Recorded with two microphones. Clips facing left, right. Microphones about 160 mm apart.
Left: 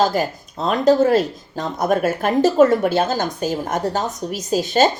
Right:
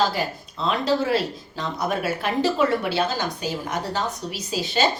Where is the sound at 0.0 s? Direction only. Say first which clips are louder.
Left 5 dB; 45° left (ahead or behind).